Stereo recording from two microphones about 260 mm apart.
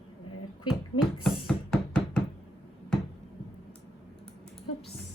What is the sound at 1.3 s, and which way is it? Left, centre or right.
Knock, centre.